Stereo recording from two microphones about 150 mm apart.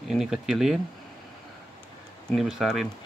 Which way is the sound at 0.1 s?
5° right (ahead or behind).